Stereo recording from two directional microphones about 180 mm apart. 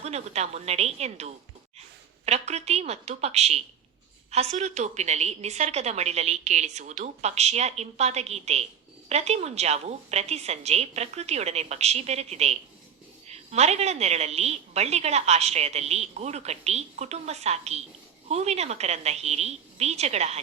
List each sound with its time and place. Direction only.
0.0 s a woman's voice: 35° right (ahead or behind)